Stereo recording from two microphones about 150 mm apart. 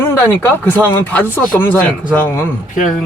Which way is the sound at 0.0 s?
15° left (ahead or behind).